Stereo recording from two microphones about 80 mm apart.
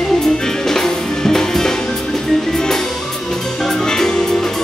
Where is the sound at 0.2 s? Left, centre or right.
Centre.